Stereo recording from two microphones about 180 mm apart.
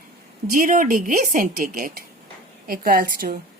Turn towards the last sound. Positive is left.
turn(degrees=-55)  # may be behind; listen again after turning